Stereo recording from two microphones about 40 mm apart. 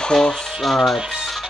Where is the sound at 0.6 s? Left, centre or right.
Centre.